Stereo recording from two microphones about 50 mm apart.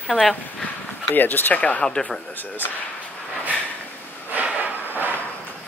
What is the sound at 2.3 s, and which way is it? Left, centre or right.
Speech, left.